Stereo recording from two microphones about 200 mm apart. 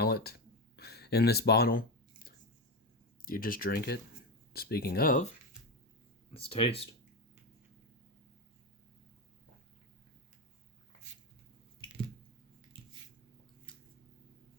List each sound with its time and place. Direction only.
0.0 s a sound: 50° left (ahead or behind)
3.2 s speech: 45° left (ahead or behind)
6.3 s speech: 30° left (ahead or behind)